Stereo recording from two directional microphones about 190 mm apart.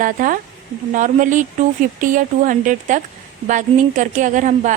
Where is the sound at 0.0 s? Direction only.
45° right (ahead or behind).